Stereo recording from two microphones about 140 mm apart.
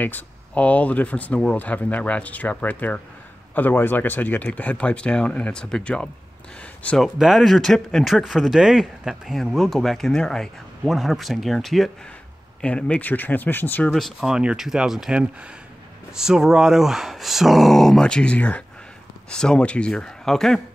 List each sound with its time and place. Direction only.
0.0 s speech: 10° left (ahead or behind)
7.2 s speech: centre (ahead or behind); by 13.9 s 15° left (ahead or behind)
13.9 s speech: centre (ahead or behind)